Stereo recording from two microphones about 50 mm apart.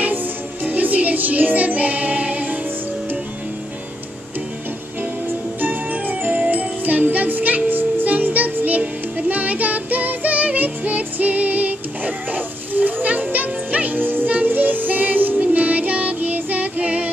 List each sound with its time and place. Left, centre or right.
0.7 s music: right
5.6 s music: right